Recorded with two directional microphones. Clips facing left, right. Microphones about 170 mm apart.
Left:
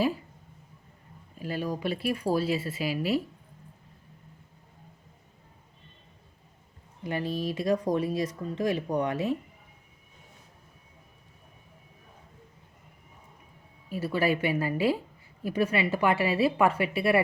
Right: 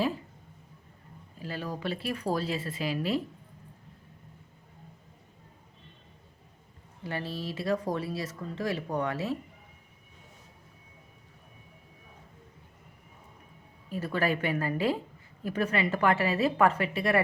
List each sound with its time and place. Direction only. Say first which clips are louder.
1.4 s speech: left 4 dB; 15° left (ahead or behind)
7.0 s speech: left 5 dB; 15° left (ahead or behind)
13.9 s speech: left 2 dB; 10° left (ahead or behind)